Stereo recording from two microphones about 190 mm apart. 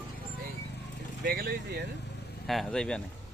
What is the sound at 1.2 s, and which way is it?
Speech, 55° right (ahead or behind).